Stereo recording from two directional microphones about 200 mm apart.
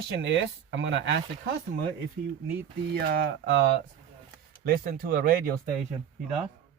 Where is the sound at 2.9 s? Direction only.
55° right (ahead or behind).